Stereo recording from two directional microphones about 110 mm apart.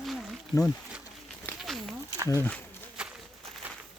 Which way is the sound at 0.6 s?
Centre (ahead or behind).